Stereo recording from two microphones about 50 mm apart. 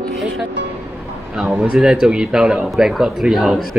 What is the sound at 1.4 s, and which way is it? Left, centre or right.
Speech, right.